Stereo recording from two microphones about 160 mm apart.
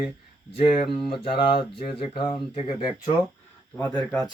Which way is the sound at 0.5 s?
35° left (ahead or behind).